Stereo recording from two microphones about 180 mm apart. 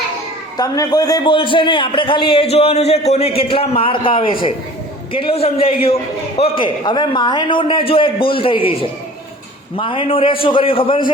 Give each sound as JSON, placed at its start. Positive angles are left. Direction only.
{"t": 0.5, "sound": "a man's voice", "side_deg": 20}